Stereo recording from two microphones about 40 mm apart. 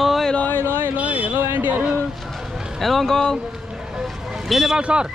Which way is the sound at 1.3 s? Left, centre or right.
Right.